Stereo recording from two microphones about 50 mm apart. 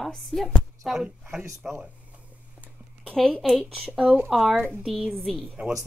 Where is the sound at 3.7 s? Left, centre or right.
Centre.